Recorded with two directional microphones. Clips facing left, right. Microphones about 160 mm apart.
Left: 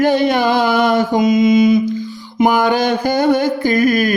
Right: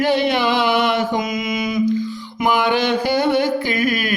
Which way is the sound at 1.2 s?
25° left (ahead or behind).